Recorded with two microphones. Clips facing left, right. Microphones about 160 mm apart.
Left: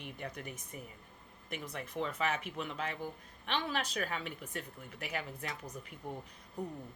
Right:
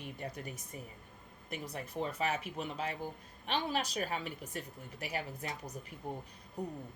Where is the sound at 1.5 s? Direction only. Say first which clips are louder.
Even; 40° right (ahead or behind).